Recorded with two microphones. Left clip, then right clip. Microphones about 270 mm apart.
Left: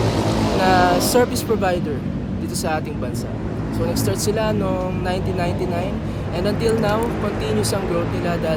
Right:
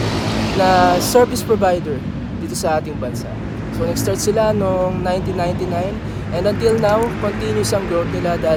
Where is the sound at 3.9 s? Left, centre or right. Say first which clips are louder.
Right 6 dB; centre.